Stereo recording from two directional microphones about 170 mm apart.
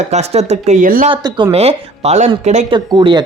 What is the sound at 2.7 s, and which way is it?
Speech, 30° right (ahead or behind).